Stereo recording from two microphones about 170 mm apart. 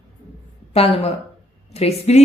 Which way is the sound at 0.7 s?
35° left (ahead or behind).